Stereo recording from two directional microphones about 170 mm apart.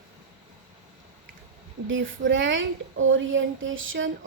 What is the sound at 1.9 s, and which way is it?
Speech, 90° right.